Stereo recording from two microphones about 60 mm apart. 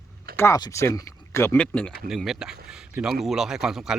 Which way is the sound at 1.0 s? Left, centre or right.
Left.